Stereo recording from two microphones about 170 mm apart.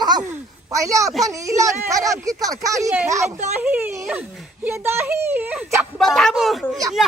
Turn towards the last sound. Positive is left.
turn(degrees=0)  # may be behind; listen again after turning